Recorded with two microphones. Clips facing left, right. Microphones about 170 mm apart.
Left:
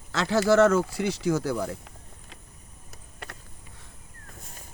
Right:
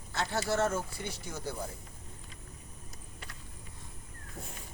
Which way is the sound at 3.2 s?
65° left (ahead or behind).